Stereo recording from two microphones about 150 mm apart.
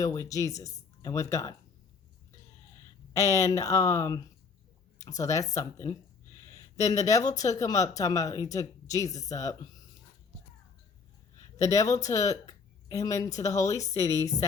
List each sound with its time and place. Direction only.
0.0 s speech: 20° left (ahead or behind)
3.1 s speech: 20° left (ahead or behind)
11.6 s speech: 20° left (ahead or behind)